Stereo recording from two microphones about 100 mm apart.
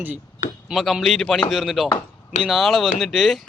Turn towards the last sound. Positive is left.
turn(degrees=0)  # may be behind; listen again after turning